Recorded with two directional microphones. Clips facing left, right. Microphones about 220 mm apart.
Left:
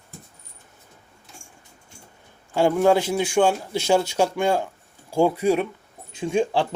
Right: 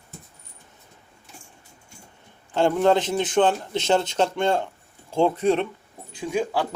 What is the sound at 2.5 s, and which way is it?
A man's voice, 10° left (ahead or behind).